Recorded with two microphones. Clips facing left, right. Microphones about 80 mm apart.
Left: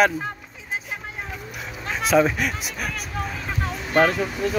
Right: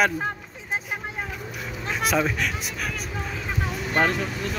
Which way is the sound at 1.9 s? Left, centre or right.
Centre.